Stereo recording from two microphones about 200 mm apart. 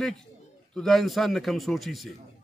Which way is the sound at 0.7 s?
Centre (ahead or behind).